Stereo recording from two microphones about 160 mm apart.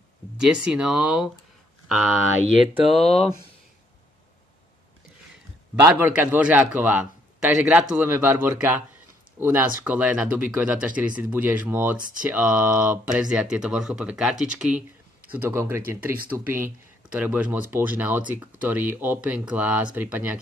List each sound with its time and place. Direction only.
0.4 s speech: 5° right (ahead or behind)
5.8 s speech: 15° right (ahead or behind)